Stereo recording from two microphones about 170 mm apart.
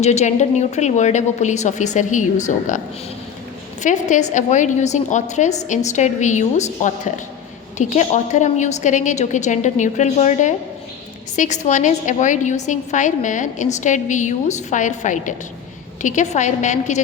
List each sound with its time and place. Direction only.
0.0 s a woman's voice: 40° left (ahead or behind)
3.8 s a woman's voice: 45° left (ahead or behind)